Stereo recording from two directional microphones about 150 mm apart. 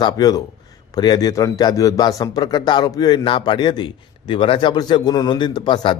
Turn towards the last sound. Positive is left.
turn(degrees=30)  # may be behind; listen again after turning